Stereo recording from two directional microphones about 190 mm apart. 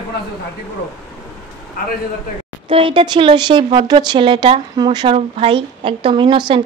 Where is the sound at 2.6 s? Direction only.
25° right (ahead or behind).